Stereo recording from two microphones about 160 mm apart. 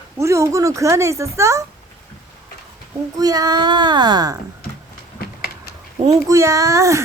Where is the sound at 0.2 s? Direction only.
20° right (ahead or behind).